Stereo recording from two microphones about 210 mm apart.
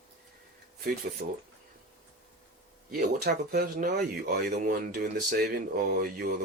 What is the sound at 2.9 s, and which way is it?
Speech, 45° right (ahead or behind).